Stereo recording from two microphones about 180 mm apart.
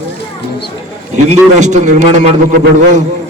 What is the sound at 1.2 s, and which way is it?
A man's voice, 40° right (ahead or behind).